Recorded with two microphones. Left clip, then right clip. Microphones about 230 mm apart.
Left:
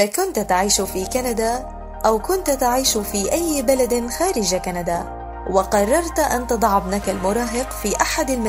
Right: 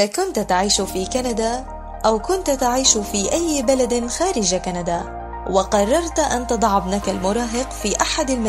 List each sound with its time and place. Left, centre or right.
0.0 s speech: right